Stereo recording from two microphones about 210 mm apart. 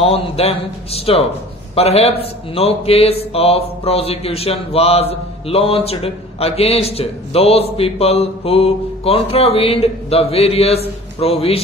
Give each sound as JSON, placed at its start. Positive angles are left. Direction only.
{"t": 0.0, "sound": "a man's voice", "side_deg": 30}